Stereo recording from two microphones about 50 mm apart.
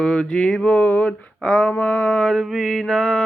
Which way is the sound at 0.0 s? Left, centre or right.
Centre.